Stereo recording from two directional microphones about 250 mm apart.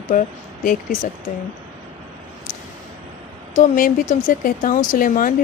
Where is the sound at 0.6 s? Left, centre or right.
Left.